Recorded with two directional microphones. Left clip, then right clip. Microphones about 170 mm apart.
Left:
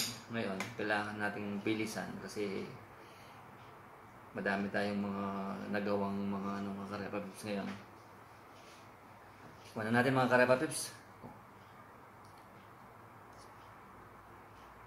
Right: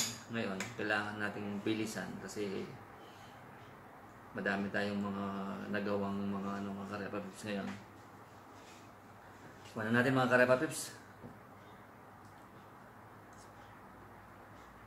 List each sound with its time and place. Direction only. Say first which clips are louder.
0.3 s speech: even; centre (ahead or behind)
4.4 s speech: left 1 dB; centre (ahead or behind)
9.8 s speech: even; centre (ahead or behind)